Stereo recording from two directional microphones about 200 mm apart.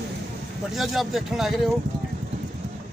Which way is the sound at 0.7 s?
Centre (ahead or behind).